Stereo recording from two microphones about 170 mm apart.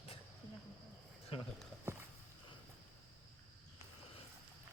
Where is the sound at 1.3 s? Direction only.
35° left (ahead or behind).